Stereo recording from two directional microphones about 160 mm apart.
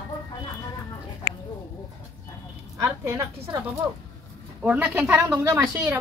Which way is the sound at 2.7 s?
15° right (ahead or behind).